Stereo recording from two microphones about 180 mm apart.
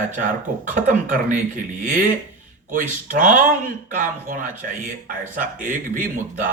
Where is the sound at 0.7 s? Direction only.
45° right (ahead or behind).